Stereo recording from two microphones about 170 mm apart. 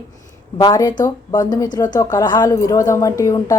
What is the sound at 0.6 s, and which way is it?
A woman's voice, 25° left (ahead or behind).